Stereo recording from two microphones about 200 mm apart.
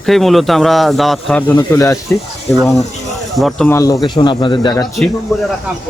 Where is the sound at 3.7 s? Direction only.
15° left (ahead or behind).